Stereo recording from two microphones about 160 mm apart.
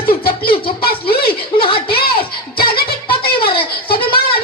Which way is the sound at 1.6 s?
35° left (ahead or behind).